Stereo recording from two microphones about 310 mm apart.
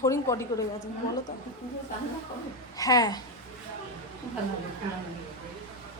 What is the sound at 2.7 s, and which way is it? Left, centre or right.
Speech, centre.